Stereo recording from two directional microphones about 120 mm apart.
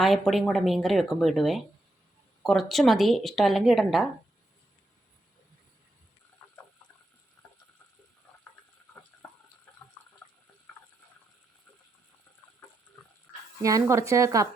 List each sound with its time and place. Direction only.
0.0 s a woman's voice: centre (ahead or behind)
9.2 s water: 5° left (ahead or behind)
13.6 s speech: 25° right (ahead or behind)